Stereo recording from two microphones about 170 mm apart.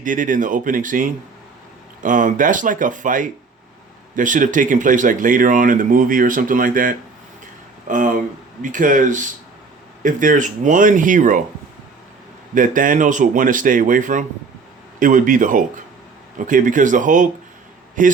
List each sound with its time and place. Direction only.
0.0 s speech: 50° right (ahead or behind)
12.5 s speech: 50° right (ahead or behind)